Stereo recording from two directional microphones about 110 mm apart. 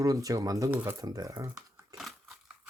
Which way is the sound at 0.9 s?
35° right (ahead or behind).